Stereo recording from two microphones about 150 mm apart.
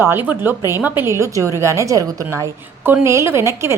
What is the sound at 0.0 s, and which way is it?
A woman's voice, 15° right (ahead or behind).